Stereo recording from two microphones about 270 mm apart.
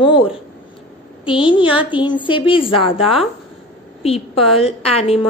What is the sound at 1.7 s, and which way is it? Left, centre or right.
Speech, centre.